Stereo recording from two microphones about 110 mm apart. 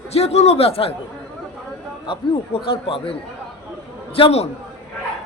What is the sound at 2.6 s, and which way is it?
Speech, 50° left (ahead or behind).